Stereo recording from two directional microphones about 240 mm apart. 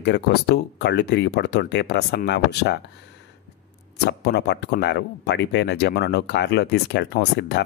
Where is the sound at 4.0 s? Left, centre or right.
Left.